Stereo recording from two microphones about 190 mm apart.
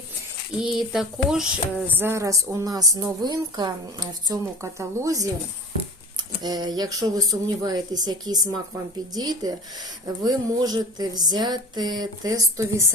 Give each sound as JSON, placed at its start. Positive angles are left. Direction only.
{"t": 0.6, "sound": "a woman's voice", "side_deg": 0}
{"t": 6.4, "sound": "speech", "side_deg": -20}